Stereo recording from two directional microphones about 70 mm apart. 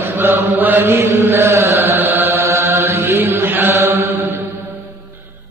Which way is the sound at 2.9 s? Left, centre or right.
Right.